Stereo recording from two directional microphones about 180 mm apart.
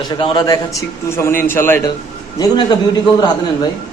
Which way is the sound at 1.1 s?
15° left (ahead or behind).